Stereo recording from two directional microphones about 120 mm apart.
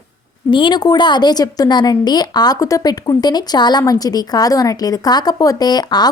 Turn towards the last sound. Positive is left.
turn(degrees=35)  # may be behind; listen again after turning